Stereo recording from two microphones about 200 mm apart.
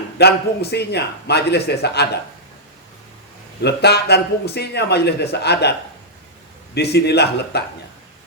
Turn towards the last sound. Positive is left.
turn(degrees=55)  # may be behind; listen again after turning